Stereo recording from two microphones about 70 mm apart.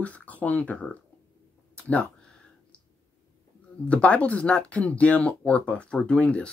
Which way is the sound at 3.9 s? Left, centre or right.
Centre.